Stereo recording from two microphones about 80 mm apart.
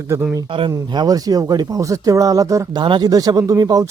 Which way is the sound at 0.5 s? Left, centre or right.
Right.